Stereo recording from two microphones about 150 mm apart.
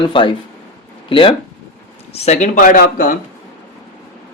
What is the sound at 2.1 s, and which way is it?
Speech, 45° left (ahead or behind).